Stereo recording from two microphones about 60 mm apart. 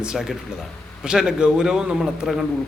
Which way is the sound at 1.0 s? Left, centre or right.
Centre.